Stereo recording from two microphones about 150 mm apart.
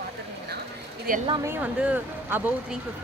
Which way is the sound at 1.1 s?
70° right (ahead or behind).